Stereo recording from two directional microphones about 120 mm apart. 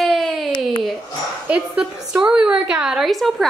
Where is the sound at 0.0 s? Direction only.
Centre (ahead or behind).